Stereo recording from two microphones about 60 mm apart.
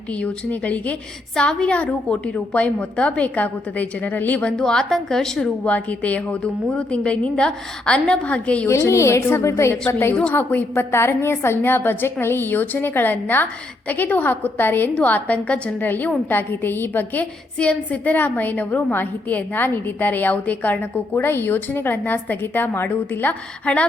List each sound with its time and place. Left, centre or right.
0.1 s a woman's voice: left
1.4 s a woman's voice: centre
4.6 s a woman's voice: centre
5.6 s a woman's voice: left
8.9 s a woman's voice: left
10.3 s a woman's voice: left
10.9 s a woman's voice: left
15.8 s a woman's voice: left
17.6 s a woman's voice: left